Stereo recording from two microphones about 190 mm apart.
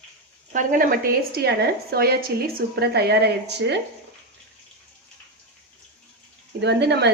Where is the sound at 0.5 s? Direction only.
45° right (ahead or behind); by 3.7 s 65° right (ahead or behind).